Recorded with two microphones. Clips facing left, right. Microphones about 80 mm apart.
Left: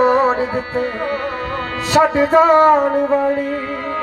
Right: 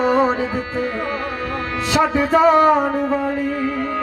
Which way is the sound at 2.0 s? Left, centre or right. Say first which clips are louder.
Left 5 dB; left.